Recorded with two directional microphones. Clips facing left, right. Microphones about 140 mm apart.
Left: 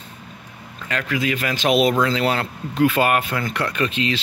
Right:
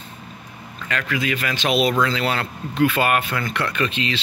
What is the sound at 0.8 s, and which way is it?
Speech, 35° left (ahead or behind).